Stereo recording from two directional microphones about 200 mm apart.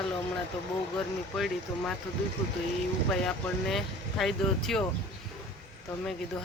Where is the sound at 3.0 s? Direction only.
5° left (ahead or behind).